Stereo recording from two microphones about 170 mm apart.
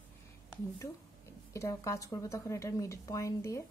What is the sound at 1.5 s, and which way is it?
A woman's voice, 15° left (ahead or behind).